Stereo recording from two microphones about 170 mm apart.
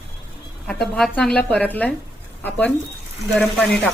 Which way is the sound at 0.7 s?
Centre (ahead or behind).